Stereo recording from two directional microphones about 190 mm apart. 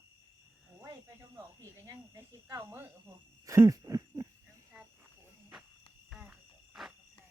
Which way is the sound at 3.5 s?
15° right (ahead or behind).